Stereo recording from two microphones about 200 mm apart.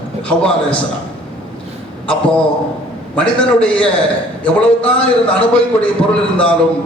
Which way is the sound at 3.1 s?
5° left (ahead or behind).